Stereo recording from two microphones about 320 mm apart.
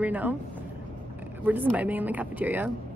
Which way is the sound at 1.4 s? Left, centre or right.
Centre.